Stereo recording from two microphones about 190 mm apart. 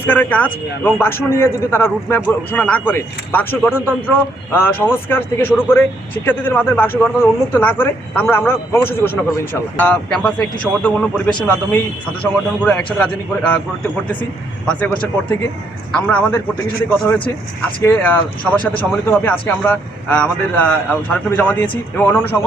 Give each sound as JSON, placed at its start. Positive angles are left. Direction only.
{"t": 0.0, "sound": "a man's voice", "side_deg": 10}
{"t": 14.7, "sound": "a man's voice", "side_deg": 10}
{"t": 17.8, "sound": "a man's voice", "side_deg": 10}